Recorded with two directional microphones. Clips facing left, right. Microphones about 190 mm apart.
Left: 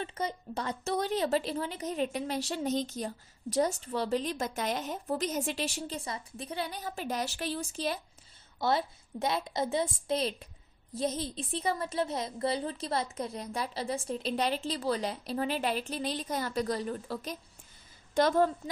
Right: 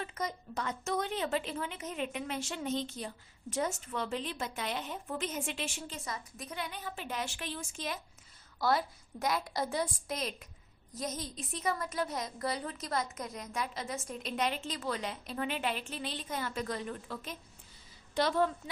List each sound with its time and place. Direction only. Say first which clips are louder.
0.0 s a woman's voice: left 3 dB; 30° left (ahead or behind)
18.1 s a woman's voice: left 4 dB; 45° left (ahead or behind)